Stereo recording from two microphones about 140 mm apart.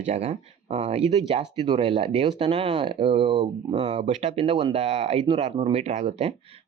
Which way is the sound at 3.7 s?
55° right (ahead or behind).